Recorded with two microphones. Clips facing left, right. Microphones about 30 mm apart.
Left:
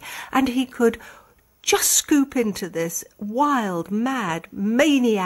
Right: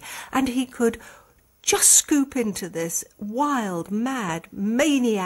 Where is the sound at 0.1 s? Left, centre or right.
Centre.